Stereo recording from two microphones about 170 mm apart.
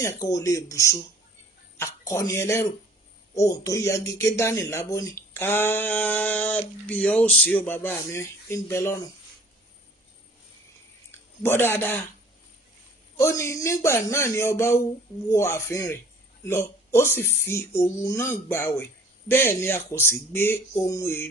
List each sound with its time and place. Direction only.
0.0 s speech: 20° left (ahead or behind)
11.4 s speech: 15° left (ahead or behind)
13.1 s speech: 15° left (ahead or behind)